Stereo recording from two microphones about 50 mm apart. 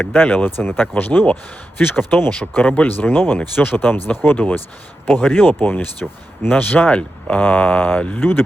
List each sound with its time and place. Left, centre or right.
0.0 s speech: left
6.9 s speech: left
8.2 s speech: left